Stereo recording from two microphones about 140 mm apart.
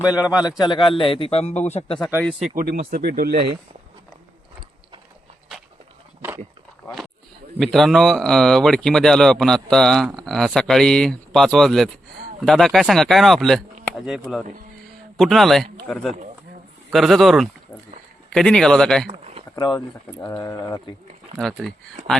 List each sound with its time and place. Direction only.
0.0 s a man's voice: 25° left (ahead or behind); by 2.0 s 50° left (ahead or behind)
2.6 s speech: 85° right
7.6 s a man's voice: centre (ahead or behind)
19.1 s a sound: 45° right (ahead or behind)
19.5 s speech: 30° left (ahead or behind)
21.3 s a man's voice: centre (ahead or behind)